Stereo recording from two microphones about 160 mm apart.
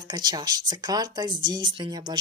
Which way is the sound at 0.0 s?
25° right (ahead or behind).